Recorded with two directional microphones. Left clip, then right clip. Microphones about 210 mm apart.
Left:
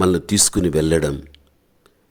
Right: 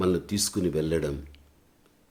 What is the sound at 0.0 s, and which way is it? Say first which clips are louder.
Speech: left 9 dB; 45° left (ahead or behind).